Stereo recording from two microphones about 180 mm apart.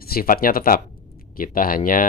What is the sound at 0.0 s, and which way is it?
Speech, 55° left (ahead or behind).